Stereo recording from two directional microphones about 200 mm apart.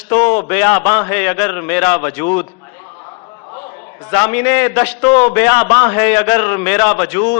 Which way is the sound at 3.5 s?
20° left (ahead or behind).